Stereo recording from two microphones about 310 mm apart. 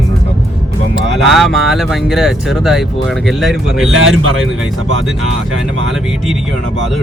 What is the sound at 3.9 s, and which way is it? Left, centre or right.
Speech, right.